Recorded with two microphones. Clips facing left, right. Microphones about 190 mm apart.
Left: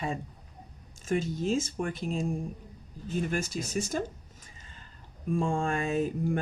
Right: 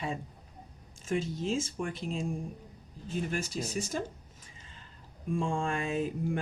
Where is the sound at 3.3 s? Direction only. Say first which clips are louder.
Left 2 dB; 45° left (ahead or behind).